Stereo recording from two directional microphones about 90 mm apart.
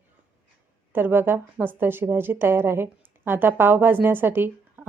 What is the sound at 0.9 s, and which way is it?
A woman's voice, 25° right (ahead or behind).